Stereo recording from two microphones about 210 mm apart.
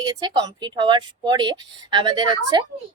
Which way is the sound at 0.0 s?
20° right (ahead or behind).